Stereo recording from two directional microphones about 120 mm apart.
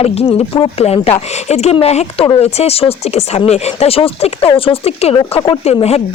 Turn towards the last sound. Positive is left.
turn(degrees=60)  # may be behind; listen again after turning